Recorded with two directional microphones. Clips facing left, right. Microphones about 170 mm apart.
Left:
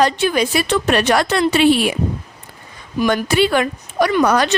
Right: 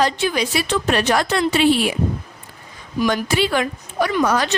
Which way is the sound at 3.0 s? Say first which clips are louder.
Left 4 dB; 60° left (ahead or behind).